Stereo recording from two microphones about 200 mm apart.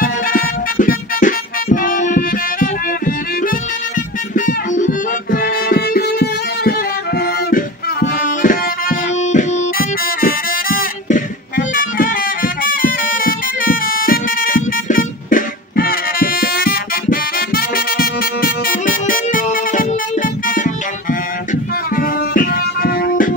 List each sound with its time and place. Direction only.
0.0 s music: 45° left (ahead or behind)
4.5 s music: 40° left (ahead or behind)
8.4 s music: 40° left (ahead or behind)
21.9 s music: 45° left (ahead or behind)